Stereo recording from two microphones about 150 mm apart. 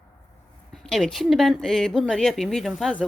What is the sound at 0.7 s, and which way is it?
Speech, centre (ahead or behind).